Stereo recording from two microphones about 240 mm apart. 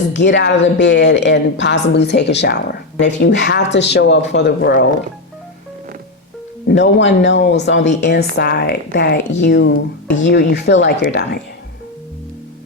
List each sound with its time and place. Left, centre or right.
0.1 s speech: left
6.7 s speech: left